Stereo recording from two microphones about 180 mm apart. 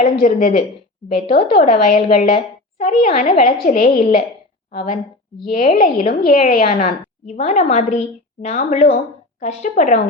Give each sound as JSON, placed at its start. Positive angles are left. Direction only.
{"t": 0.0, "sound": "a woman's voice", "side_deg": 45}
{"t": 5.5, "sound": "a woman's voice", "side_deg": 45}